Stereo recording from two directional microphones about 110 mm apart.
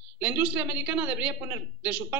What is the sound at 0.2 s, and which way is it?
Speech, 15° right (ahead or behind).